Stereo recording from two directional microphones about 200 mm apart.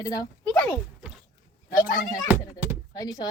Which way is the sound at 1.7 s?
40° left (ahead or behind).